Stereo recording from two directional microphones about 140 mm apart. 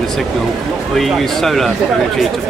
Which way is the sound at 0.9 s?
Centre (ahead or behind).